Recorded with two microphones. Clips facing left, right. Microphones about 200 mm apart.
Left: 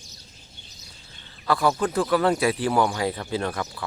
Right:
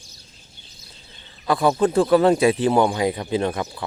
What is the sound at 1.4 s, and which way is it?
Speech, 20° right (ahead or behind).